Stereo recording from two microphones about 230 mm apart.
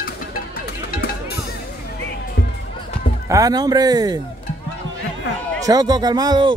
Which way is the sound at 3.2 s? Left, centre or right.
Centre.